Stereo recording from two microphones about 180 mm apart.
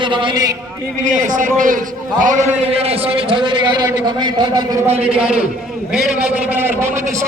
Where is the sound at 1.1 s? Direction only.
45° right (ahead or behind).